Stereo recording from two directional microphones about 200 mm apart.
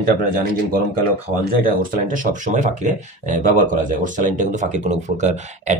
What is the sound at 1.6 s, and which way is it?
Speech, 45° right (ahead or behind).